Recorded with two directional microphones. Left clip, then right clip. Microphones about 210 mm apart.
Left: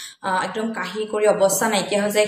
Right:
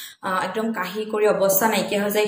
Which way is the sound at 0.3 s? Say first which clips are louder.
Left 1 dB; centre (ahead or behind).